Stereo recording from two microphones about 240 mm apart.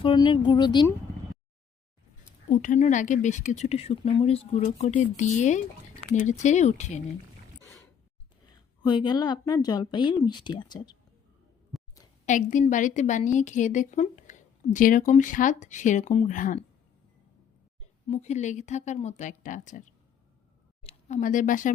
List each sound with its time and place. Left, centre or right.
0.0 s speech: centre
2.5 s speech: left
7.6 s a sound: centre
8.4 s a woman's voice: centre
11.7 s a sound: centre
12.2 s a woman's voice: left
18.1 s speech: left
20.8 s speech: left